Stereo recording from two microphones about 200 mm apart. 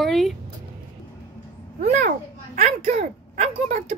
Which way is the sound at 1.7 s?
40° right (ahead or behind).